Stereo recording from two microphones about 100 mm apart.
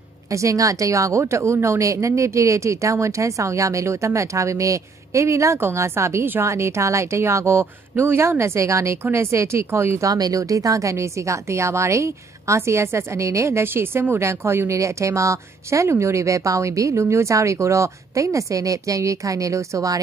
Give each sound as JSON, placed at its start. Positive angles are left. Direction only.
{"t": 0.3, "sound": "speech", "side_deg": -30}